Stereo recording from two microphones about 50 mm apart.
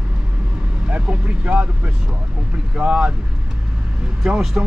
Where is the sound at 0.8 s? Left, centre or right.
Right.